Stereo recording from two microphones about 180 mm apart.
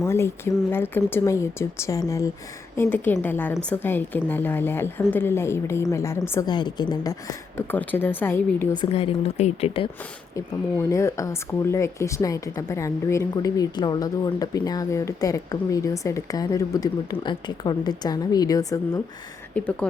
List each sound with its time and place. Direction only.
0.0 s a woman's voice: 15° left (ahead or behind)
8.8 s a woman's voice: 30° left (ahead or behind)
10.8 s speech: 15° left (ahead or behind)
19.6 s a woman's voice: 10° left (ahead or behind)